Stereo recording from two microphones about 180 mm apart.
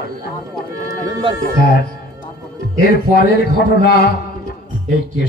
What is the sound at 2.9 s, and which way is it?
A woman's voice, 60° left (ahead or behind).